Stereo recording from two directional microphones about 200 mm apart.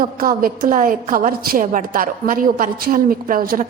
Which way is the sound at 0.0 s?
45° right (ahead or behind).